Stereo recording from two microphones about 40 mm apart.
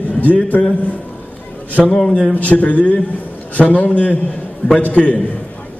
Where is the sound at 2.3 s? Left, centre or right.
Left.